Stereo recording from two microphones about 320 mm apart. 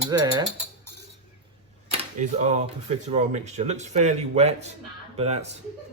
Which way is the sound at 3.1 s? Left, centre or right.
Centre.